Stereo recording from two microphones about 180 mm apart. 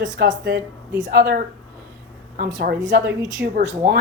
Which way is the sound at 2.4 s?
50° right (ahead or behind).